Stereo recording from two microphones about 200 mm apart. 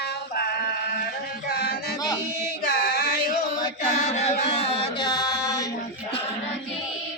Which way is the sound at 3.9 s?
35° left (ahead or behind).